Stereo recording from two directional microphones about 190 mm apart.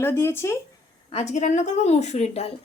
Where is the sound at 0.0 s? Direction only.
15° left (ahead or behind).